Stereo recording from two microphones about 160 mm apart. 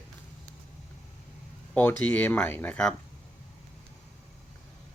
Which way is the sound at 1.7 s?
10° left (ahead or behind).